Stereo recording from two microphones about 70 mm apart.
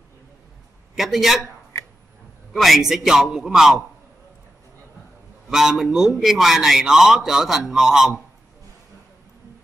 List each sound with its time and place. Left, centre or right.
0.9 s a man's voice: centre
2.5 s a man's voice: centre
5.5 s a man's voice: centre